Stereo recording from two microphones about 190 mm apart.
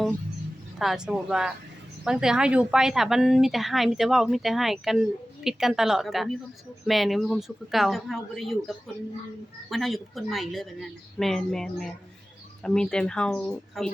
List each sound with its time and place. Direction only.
0.8 s a woman's voice: centre (ahead or behind)